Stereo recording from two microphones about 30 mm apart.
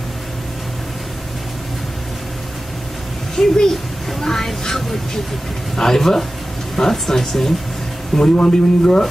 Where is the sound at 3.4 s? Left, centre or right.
Centre.